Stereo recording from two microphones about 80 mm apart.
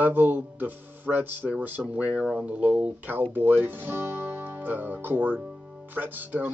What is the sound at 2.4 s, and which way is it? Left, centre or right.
Speech, centre.